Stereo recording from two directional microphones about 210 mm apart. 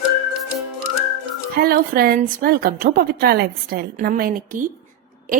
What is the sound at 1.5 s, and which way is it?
A woman's voice, 45° right (ahead or behind).